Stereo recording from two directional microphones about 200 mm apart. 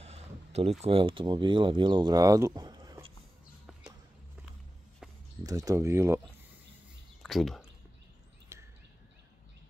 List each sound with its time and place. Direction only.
0.0 s speech: 30° right (ahead or behind)
5.4 s speech: 15° right (ahead or behind)
7.2 s speech: centre (ahead or behind)
8.5 s a sound: 15° right (ahead or behind)